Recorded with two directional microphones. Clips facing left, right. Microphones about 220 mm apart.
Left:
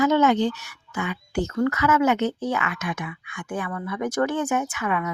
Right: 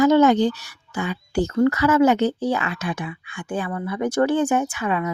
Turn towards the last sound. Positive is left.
turn(degrees=-30)  # may be behind; listen again after turning